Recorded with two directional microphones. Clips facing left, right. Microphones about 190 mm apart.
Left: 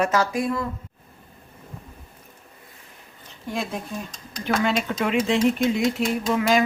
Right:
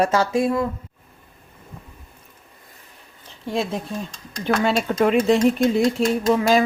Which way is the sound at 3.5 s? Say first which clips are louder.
Right 4 dB; 30° right (ahead or behind).